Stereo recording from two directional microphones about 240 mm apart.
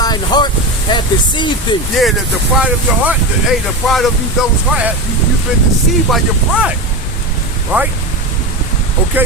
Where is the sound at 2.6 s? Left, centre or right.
Centre.